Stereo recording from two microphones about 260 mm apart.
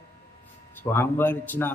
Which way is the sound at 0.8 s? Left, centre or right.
Centre.